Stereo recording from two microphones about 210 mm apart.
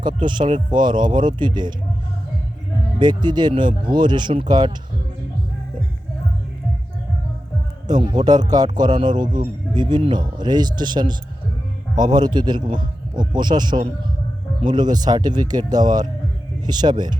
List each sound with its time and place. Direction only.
0.2 s speech: 20° right (ahead or behind)
3.0 s speech: 20° right (ahead or behind)
8.0 s speech: 20° right (ahead or behind)
9.2 s speech: 40° right (ahead or behind)
9.7 s speech: 20° right (ahead or behind)